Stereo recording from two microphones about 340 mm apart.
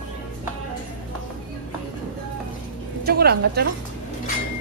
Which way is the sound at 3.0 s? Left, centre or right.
Right.